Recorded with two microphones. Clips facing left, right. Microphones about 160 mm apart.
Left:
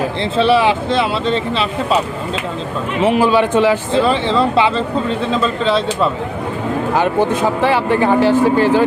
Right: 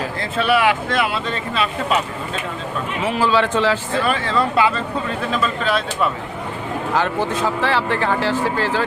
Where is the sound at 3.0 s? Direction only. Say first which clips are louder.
Left 5 dB; 20° left (ahead or behind).